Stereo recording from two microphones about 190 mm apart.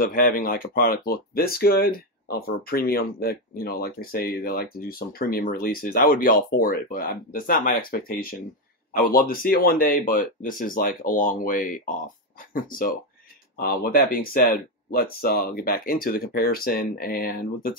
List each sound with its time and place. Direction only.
0.0 s speech: 50° left (ahead or behind)